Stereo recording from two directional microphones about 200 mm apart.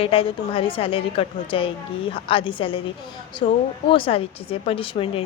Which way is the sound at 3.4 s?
35° left (ahead or behind).